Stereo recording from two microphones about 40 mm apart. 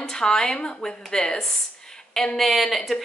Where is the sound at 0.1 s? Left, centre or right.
Centre.